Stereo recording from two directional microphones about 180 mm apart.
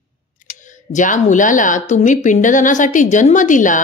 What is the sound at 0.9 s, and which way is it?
A woman's voice, 45° left (ahead or behind).